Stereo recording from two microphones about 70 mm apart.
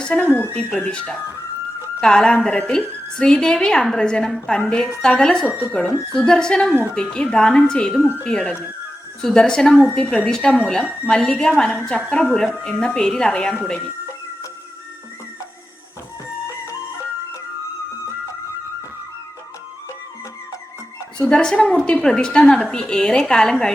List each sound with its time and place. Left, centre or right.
0.0 s a woman's voice: centre
21.2 s a woman's voice: centre